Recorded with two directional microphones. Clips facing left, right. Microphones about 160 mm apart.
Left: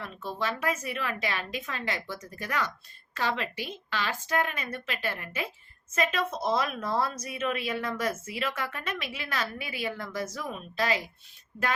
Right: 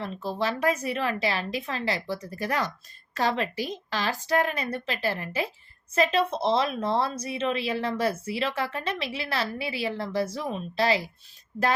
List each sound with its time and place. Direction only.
0.0 s speech: 30° right (ahead or behind)